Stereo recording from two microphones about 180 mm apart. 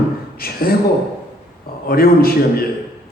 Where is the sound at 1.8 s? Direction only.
55° left (ahead or behind).